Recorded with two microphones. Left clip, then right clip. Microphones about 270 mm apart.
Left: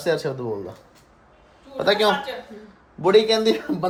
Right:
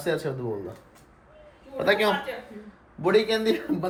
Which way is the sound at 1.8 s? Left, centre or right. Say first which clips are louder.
Left 4 dB; centre.